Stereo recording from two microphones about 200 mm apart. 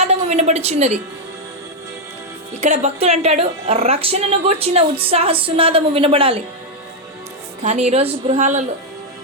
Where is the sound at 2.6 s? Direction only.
35° right (ahead or behind).